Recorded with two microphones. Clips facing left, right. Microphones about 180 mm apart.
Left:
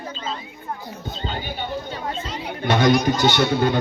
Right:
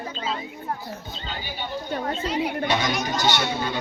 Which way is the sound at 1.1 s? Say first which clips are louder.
Left 6 dB; 50° left (ahead or behind).